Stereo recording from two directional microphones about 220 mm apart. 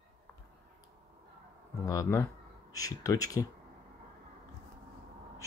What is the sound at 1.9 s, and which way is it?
Speech, 15° left (ahead or behind).